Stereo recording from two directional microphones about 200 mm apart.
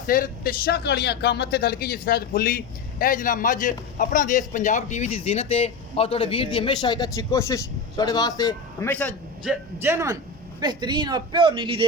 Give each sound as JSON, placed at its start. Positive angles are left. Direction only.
{"t": 0.1, "sound": "speech", "side_deg": 45}
{"t": 9.8, "sound": "a man's voice", "side_deg": -15}